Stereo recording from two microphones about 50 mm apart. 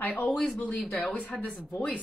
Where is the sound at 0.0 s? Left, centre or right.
Left.